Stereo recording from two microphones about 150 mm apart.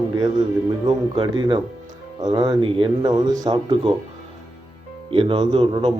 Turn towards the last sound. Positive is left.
turn(degrees=-40)  # may be behind; listen again after turning